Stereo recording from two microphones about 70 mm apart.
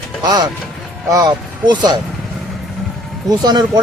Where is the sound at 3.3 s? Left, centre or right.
Right.